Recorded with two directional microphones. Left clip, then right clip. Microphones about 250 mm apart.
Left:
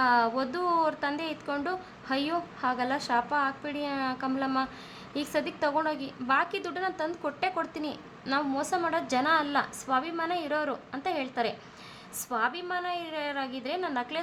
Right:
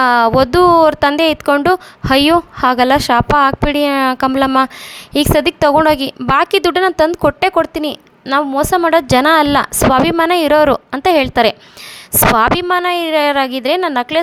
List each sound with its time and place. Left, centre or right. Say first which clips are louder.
0.0 s a woman's voice: right 15 dB; right